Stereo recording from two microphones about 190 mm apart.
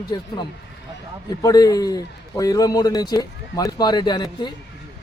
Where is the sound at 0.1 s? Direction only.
20° left (ahead or behind).